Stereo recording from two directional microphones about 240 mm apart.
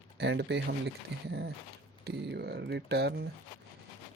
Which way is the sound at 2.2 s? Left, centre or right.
Right.